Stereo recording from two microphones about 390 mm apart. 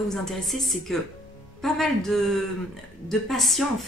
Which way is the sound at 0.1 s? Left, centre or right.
Centre.